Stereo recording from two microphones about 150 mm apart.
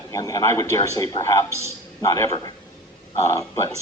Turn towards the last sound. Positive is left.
turn(degrees=20)  # may be behind; listen again after turning